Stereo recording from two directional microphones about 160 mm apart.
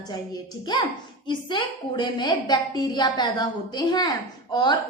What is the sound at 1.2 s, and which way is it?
A woman's voice, 30° left (ahead or behind).